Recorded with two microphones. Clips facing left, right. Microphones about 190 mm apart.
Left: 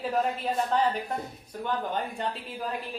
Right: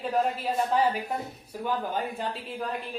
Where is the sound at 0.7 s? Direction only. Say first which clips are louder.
Right 1 dB; 5° right (ahead or behind).